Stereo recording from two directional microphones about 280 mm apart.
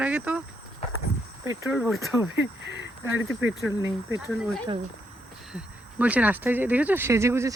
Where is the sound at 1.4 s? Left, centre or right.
Centre.